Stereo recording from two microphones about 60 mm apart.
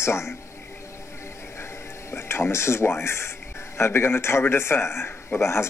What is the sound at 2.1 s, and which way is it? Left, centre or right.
A man's voice, left.